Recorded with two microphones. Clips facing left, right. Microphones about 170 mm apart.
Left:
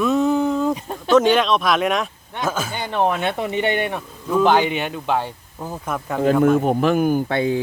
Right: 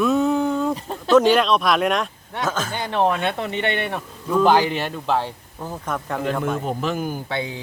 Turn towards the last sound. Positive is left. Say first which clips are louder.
# left 8 dB
turn(degrees=50)  # may be behind; listen again after turning